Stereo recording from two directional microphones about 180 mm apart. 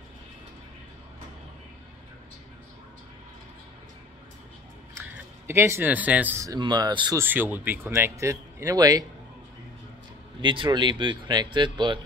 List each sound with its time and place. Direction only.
5.5 s speech: 15° right (ahead or behind)
7.2 s speech: 10° right (ahead or behind)
10.4 s speech: 25° right (ahead or behind)